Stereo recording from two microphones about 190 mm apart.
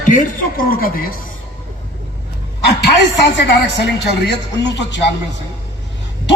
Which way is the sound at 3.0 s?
65° left (ahead or behind).